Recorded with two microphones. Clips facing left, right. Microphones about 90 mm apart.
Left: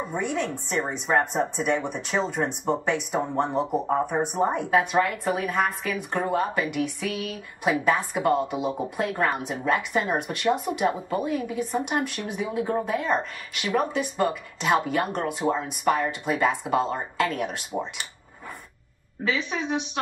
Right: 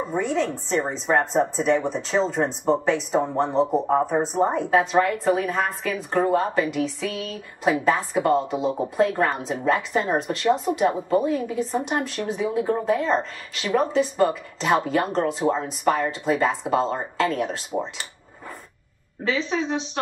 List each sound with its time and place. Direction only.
0.1 s a woman's voice: 30° right (ahead or behind)
19.2 s a woman's voice: 30° right (ahead or behind)